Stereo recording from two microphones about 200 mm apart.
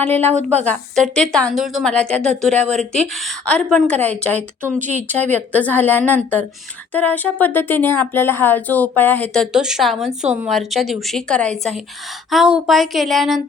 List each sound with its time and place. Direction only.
0.3 s speech: 35° right (ahead or behind)
0.6 s a woman's voice: 5° left (ahead or behind)
4.8 s speech: 35° right (ahead or behind)
5.0 s a woman's voice: 10° left (ahead or behind)